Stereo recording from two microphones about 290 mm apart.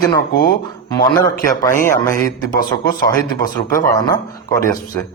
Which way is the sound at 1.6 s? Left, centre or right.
Centre.